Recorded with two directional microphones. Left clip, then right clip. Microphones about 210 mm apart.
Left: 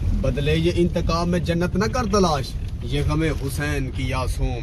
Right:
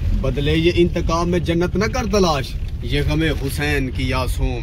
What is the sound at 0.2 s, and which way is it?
A man's voice, centre (ahead or behind).